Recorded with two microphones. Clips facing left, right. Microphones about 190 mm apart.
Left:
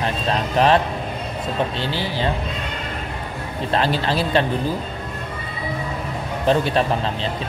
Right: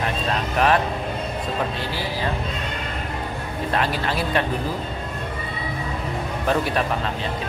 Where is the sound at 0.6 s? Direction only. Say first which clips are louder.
Left 3 dB; 30° left (ahead or behind).